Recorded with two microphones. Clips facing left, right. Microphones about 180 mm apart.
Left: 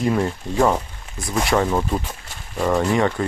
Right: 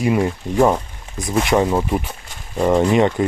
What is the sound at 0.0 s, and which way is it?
Speech, 15° right (ahead or behind).